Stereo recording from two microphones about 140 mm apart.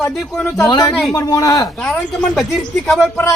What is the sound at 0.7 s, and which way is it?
Speech, 30° left (ahead or behind).